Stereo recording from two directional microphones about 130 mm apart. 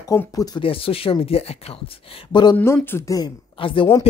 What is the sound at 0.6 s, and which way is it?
Speech, 45° left (ahead or behind).